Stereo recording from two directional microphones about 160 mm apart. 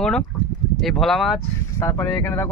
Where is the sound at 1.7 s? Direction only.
20° left (ahead or behind).